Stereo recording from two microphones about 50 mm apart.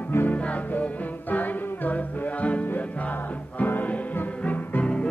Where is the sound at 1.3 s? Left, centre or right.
Left.